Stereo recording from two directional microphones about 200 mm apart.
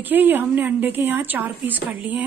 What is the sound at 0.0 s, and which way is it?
A woman's voice, 10° right (ahead or behind).